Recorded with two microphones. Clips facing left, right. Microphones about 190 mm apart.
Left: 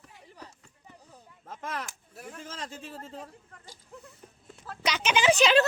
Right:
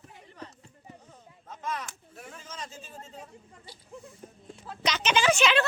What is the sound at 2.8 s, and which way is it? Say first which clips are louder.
Speech: left 4 dB; 85° left.